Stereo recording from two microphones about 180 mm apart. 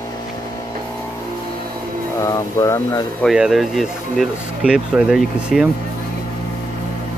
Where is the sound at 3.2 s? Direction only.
Centre (ahead or behind).